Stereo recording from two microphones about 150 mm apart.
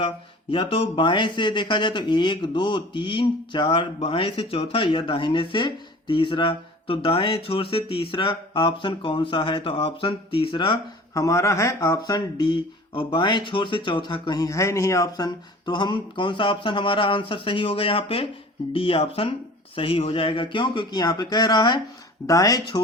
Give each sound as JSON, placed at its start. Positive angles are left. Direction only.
{"t": 0.5, "sound": "speech", "side_deg": 40}